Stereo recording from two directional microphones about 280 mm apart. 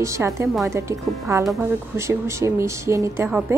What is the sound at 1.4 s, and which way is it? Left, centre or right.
A woman's voice, centre.